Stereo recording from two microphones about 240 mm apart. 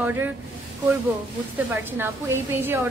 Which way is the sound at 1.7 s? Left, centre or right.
Centre.